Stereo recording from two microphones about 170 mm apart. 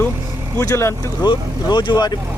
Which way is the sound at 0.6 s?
20° left (ahead or behind).